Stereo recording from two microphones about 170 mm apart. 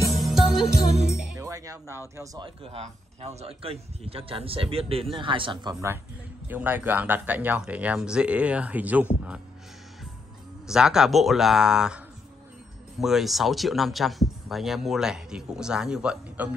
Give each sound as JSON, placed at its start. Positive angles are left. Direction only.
{"t": 0.1, "sound": "jingle bell", "side_deg": 0}
{"t": 1.4, "sound": "speech", "side_deg": -20}
{"t": 2.4, "sound": "a man's voice", "side_deg": -35}
{"t": 6.4, "sound": "speech", "side_deg": -10}
{"t": 10.7, "sound": "speech", "side_deg": -5}
{"t": 13.0, "sound": "speech", "side_deg": 0}